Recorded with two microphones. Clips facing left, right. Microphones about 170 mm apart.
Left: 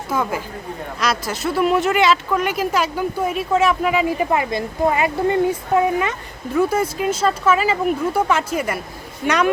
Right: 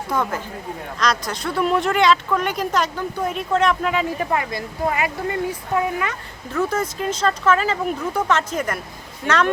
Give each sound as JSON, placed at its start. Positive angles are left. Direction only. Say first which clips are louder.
{"t": 0.1, "sound": "speech", "louder": "left 2 dB", "side_deg": 10}
{"t": 4.3, "sound": "speech", "louder": "left 3 dB", "side_deg": 20}
{"t": 6.5, "sound": "speech", "louder": "left 4 dB", "side_deg": 10}